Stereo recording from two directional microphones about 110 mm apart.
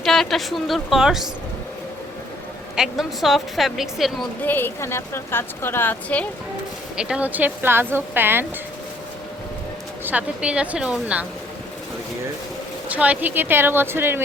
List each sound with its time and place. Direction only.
0.0 s a woman's voice: centre (ahead or behind)
2.7 s a woman's voice: 5° right (ahead or behind)
4.4 s a woman's voice: 20° left (ahead or behind)
6.9 s speech: 10° right (ahead or behind)
10.0 s a woman's voice: 15° right (ahead or behind)
12.9 s speech: 15° right (ahead or behind)